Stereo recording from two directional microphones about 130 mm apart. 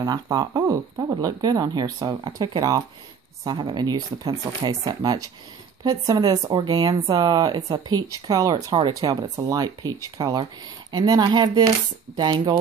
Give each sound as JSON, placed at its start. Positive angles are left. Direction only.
{"t": 0.0, "sound": "speech", "side_deg": -30}